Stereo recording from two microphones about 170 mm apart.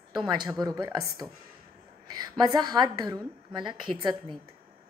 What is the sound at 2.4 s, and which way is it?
A woman's voice, 25° right (ahead or behind).